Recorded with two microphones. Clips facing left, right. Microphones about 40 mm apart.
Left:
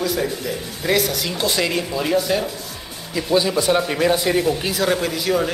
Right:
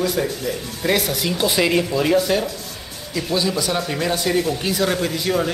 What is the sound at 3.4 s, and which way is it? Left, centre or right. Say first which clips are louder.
A woman's voice: left 3 dB; centre.